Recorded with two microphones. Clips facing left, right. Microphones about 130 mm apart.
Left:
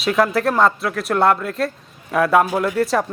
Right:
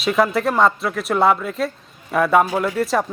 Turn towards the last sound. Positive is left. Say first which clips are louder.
# left 1 dB
turn(degrees=0)  # may be behind; listen again after turning